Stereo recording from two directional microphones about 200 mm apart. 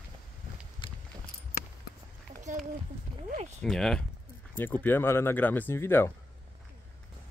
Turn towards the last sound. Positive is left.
turn(degrees=10)  # may be behind; listen again after turning